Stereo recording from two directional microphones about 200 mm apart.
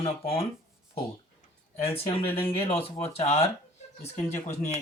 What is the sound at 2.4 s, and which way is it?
Speech, 30° left (ahead or behind).